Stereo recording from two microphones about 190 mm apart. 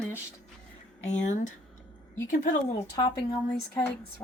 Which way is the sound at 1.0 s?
40° left (ahead or behind).